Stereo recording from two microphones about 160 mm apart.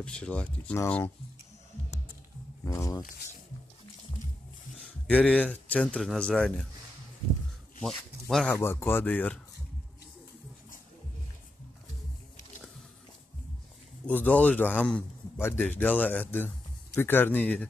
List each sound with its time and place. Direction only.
0.0 s a man's voice: 5° left (ahead or behind)
2.6 s speech: 20° left (ahead or behind)
5.0 s speech: 5° left (ahead or behind)
8.3 s speech: 5° left (ahead or behind)
8.5 s a man's voice: 15° left (ahead or behind)
14.0 s a man's voice: 10° left (ahead or behind)